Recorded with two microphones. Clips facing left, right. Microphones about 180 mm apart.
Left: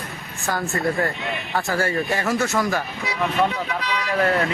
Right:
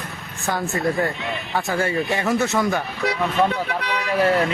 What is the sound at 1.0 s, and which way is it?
Speech, centre (ahead or behind).